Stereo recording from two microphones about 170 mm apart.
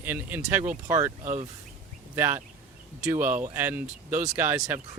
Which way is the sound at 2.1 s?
10° right (ahead or behind).